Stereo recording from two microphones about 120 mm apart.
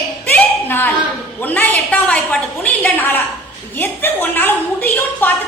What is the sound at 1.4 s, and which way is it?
A woman's voice, 15° left (ahead or behind).